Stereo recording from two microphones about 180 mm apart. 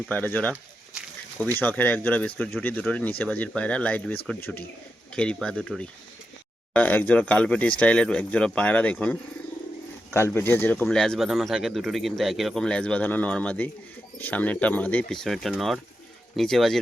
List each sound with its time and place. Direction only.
0.1 s speech: 10° left (ahead or behind)
1.5 s speech: 10° left (ahead or behind)